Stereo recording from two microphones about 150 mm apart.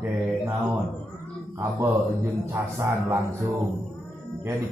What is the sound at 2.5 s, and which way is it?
Speech, 20° right (ahead or behind).